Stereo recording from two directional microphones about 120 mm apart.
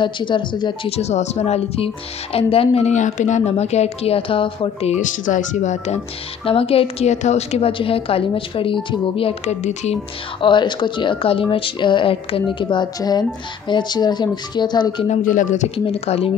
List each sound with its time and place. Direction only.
0.0 s speech: 40° left (ahead or behind)
0.8 s a woman's voice: 60° left (ahead or behind)
2.3 s a woman's voice: 55° left (ahead or behind)
4.9 s speech: 90° left
6.4 s speech: 50° left (ahead or behind)
9.5 s speech: 70° left (ahead or behind)
10.4 s speech: 40° left (ahead or behind)
15.0 s a woman's voice: 85° left; by 16.3 s 55° left (ahead or behind)